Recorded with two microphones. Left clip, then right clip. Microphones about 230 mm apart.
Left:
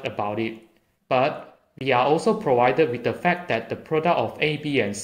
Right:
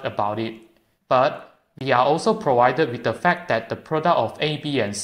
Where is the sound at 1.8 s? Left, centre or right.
Centre.